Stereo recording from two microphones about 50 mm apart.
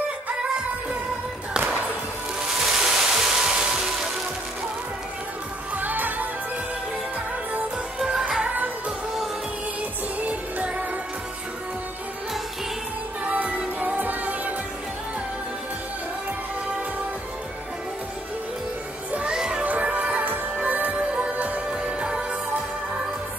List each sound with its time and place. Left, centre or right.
2.6 s music: centre
5.8 s music: right
8.0 s music: centre
10.2 s music: right
13.2 s music: right
19.3 s music: centre
19.6 s music: right